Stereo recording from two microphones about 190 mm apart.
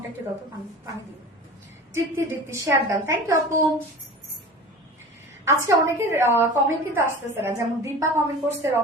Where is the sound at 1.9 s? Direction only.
15° right (ahead or behind).